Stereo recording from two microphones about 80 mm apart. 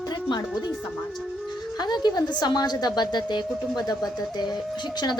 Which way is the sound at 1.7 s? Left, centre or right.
Left.